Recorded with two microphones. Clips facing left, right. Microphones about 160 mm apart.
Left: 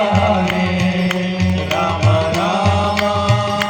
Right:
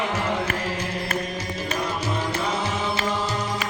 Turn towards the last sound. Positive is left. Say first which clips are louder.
# left 9 dB
turn(degrees=90)